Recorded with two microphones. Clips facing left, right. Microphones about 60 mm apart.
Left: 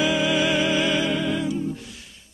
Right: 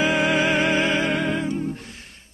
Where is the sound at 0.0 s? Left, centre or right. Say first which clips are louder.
Right 1 dB; right.